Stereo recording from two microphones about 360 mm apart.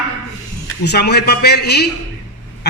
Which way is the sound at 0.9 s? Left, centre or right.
Left.